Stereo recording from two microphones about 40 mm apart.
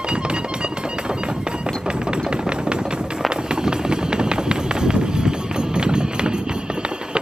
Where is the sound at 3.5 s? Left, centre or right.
Right.